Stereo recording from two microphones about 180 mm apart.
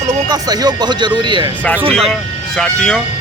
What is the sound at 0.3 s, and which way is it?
Speech, 20° right (ahead or behind).